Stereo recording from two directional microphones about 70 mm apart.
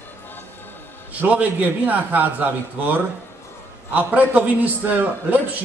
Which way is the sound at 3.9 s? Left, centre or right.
Right.